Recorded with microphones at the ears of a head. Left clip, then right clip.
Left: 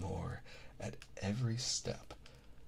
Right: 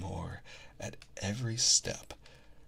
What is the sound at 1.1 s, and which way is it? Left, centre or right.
Speech, right.